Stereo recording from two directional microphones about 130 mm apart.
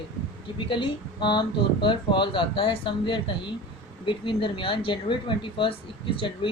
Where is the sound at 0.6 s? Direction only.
40° left (ahead or behind).